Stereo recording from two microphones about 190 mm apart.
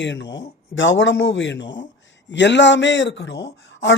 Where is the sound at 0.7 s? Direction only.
80° left.